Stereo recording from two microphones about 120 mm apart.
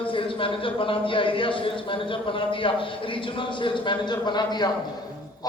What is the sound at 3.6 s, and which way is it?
A man's voice, 40° left (ahead or behind).